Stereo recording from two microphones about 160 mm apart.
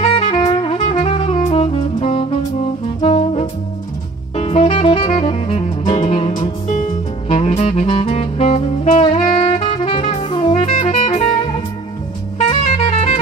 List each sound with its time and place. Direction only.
0.0 s saxophone: 35° left (ahead or behind)
6.7 s music: 50° left (ahead or behind)
7.3 s saxophone: 35° left (ahead or behind)
12.4 s music: 40° left (ahead or behind)